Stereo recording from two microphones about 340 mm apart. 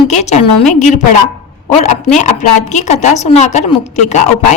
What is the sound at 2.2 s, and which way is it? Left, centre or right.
A woman's voice, left.